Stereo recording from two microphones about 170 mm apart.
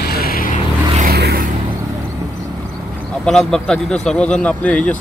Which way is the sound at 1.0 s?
70° right (ahead or behind).